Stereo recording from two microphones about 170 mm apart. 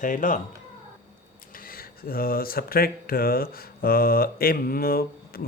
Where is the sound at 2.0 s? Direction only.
60° left (ahead or behind).